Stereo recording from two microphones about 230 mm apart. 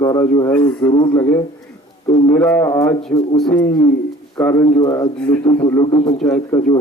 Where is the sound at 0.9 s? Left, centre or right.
Centre.